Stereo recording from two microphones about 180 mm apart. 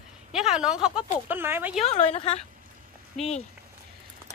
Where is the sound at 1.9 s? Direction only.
35° left (ahead or behind).